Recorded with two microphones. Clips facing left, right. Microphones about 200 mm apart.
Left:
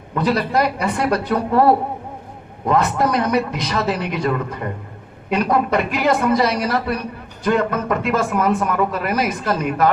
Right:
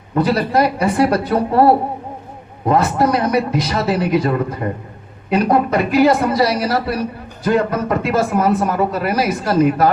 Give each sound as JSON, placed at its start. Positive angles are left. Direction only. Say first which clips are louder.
{"t": 0.2, "sound": "speech", "louder": "right 3 dB", "side_deg": -30}